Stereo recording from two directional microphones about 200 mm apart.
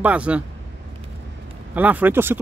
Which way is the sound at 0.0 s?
5° right (ahead or behind).